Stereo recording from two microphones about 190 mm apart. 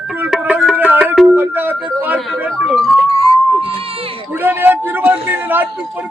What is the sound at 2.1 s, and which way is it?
Speech, centre (ahead or behind).